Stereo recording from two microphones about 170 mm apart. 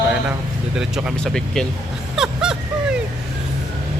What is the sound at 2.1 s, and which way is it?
Vehicle, 5° right (ahead or behind).